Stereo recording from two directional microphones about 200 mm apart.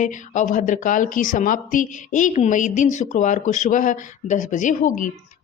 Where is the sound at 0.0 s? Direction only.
40° left (ahead or behind).